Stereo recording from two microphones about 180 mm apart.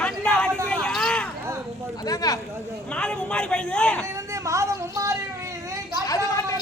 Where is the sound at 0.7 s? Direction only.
5° left (ahead or behind).